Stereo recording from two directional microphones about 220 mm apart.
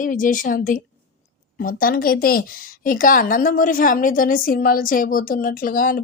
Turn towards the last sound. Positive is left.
turn(degrees=40)  # may be behind; listen again after turning